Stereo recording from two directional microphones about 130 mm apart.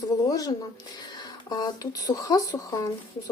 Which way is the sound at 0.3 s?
30° left (ahead or behind).